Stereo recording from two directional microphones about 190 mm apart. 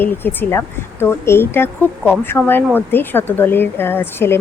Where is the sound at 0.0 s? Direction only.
10° left (ahead or behind).